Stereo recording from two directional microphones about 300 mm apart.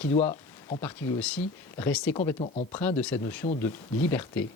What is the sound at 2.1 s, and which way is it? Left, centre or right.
Speech, centre.